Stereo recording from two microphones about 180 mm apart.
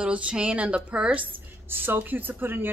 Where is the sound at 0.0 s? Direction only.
5° right (ahead or behind).